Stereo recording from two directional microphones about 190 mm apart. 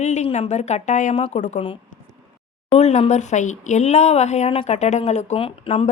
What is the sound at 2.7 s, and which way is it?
A woman's voice, 35° left (ahead or behind).